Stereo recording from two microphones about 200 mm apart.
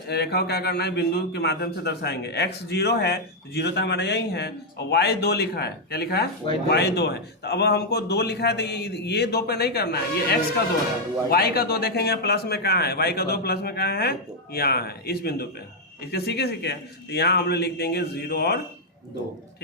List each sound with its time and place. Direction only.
0.1 s a man's voice: 55° left (ahead or behind)